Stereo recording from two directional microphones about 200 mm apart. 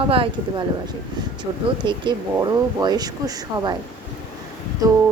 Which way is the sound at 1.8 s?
25° right (ahead or behind).